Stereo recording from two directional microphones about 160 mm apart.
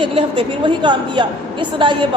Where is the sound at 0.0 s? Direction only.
35° right (ahead or behind).